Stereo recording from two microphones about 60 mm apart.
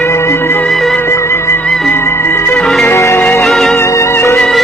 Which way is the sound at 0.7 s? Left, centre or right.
Centre.